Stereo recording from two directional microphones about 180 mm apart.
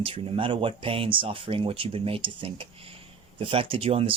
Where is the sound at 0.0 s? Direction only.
30° right (ahead or behind).